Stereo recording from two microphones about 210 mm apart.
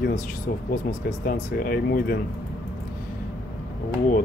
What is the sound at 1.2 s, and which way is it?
Speech, 45° left (ahead or behind).